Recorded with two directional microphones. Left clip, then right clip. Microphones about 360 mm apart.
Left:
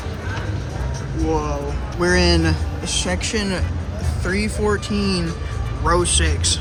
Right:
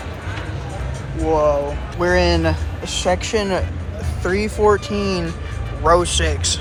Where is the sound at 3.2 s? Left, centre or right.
Centre.